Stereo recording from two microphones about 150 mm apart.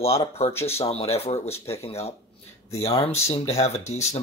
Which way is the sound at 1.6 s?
40° left (ahead or behind).